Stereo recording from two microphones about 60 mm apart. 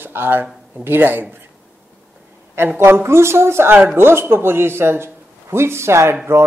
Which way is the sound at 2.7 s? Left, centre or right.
Right.